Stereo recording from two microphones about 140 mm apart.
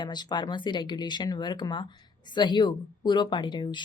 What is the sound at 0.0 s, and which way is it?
A woman's voice, 30° left (ahead or behind).